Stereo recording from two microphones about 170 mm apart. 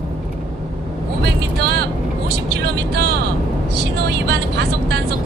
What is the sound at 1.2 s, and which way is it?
Vehicle, 75° right (ahead or behind).